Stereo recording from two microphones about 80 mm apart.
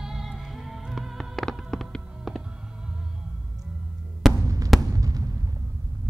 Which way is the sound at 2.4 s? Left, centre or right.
Centre.